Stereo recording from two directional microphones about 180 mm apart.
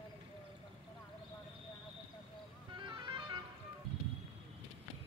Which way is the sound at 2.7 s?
25° right (ahead or behind).